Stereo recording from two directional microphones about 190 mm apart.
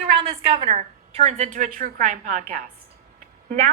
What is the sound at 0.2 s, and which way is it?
A woman's voice, 30° right (ahead or behind).